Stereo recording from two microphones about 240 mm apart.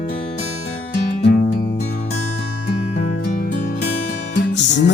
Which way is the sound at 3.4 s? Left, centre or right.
Left.